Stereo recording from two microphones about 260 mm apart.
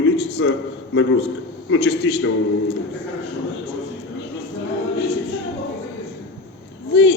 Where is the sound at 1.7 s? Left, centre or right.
Left.